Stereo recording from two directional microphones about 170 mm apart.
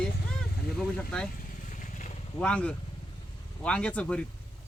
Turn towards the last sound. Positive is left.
turn(degrees=5)  # may be behind; listen again after turning